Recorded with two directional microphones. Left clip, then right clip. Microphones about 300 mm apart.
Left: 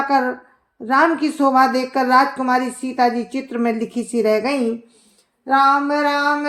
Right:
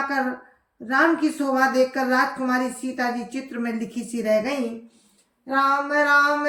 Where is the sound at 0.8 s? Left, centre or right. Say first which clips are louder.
Left 4 dB; centre.